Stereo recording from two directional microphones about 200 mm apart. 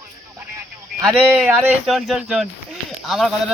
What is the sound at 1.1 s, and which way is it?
Speech, 5° right (ahead or behind).